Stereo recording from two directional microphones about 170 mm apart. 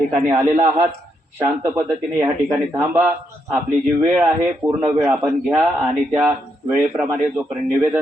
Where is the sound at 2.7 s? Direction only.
10° right (ahead or behind).